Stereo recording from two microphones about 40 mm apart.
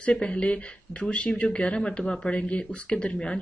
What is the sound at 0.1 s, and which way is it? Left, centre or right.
Speech, left.